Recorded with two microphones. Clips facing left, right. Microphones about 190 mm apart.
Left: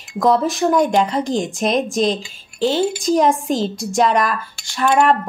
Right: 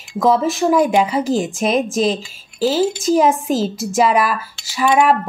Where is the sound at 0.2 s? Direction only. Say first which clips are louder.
Right 1 dB; centre (ahead or behind).